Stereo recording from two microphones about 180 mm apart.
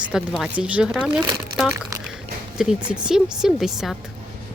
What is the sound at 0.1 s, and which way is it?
Speech, 5° right (ahead or behind).